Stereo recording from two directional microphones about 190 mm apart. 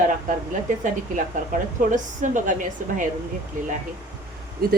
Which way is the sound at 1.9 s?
40° right (ahead or behind).